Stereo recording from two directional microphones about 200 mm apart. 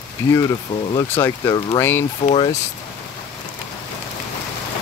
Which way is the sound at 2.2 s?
30° left (ahead or behind).